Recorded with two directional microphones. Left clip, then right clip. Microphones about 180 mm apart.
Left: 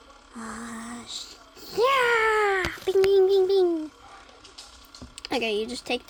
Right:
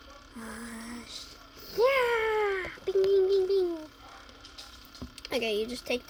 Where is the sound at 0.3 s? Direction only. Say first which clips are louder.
Left 5 dB; 50° left (ahead or behind); by 3.6 s 65° left (ahead or behind).